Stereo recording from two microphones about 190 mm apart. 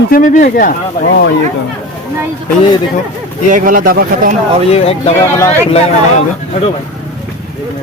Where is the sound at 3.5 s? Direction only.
45° right (ahead or behind).